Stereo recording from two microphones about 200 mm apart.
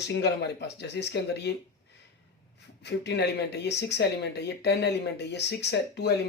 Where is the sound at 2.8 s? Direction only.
55° left (ahead or behind).